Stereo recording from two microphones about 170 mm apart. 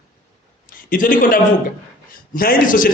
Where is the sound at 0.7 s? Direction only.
55° left (ahead or behind).